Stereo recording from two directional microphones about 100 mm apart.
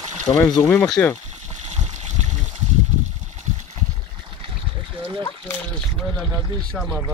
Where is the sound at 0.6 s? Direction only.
15° left (ahead or behind).